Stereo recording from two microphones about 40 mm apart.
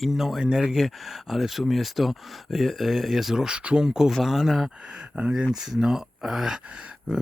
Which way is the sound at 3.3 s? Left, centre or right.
Centre.